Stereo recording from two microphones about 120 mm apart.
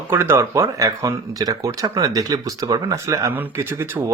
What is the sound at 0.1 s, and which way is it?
Speech, 20° right (ahead or behind).